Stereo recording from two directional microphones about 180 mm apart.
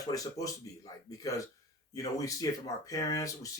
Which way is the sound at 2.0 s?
20° left (ahead or behind).